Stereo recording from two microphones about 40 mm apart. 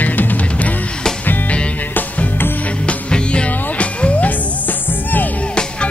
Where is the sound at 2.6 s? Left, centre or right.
Left.